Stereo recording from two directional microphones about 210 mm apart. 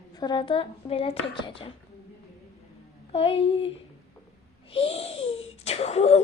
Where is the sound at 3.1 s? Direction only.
25° left (ahead or behind).